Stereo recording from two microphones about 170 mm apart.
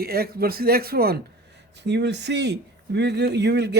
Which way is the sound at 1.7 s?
90° right.